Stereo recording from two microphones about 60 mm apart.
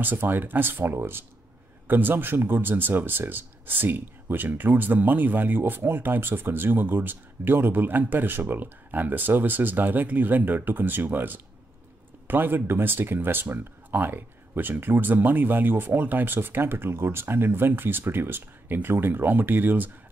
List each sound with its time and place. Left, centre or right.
0.0 s speech: right